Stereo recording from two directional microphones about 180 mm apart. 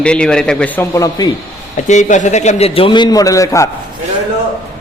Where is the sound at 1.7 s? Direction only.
40° left (ahead or behind); by 3.7 s 15° left (ahead or behind).